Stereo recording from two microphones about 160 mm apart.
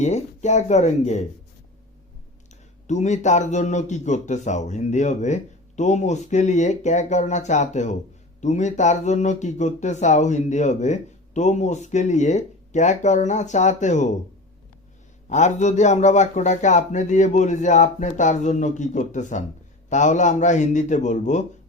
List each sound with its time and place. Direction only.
0.0 s speech: 45° left (ahead or behind)
2.8 s speech: 45° left (ahead or behind)
15.3 s speech: 50° left (ahead or behind)